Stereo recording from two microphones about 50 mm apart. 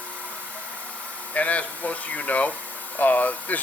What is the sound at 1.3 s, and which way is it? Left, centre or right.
Speech, left.